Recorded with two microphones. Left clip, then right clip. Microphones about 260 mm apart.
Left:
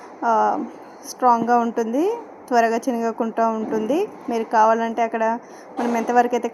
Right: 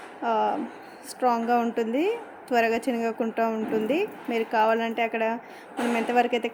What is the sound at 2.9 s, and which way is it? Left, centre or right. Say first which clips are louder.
Speech: left 4 dB; centre.